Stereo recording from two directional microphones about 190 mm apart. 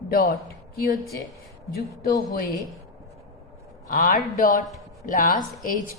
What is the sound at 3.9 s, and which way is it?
Speech, 50° left (ahead or behind).